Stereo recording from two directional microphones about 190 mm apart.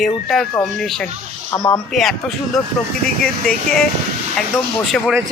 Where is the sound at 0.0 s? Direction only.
Centre (ahead or behind).